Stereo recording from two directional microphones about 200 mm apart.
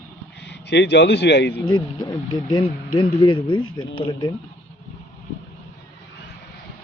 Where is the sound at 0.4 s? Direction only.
55° left (ahead or behind).